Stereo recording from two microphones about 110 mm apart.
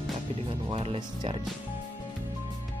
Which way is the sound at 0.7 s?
60° right (ahead or behind).